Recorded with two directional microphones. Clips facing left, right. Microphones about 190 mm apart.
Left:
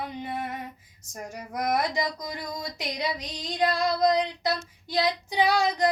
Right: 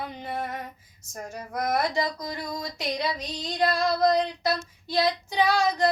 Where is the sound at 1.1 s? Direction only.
15° left (ahead or behind).